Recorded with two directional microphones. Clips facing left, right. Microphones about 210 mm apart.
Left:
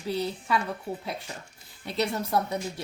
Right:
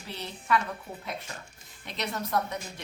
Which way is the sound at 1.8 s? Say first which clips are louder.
Left 6 dB; 35° left (ahead or behind).